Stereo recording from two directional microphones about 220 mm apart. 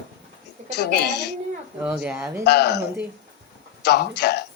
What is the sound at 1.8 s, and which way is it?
Speech, 5° right (ahead or behind).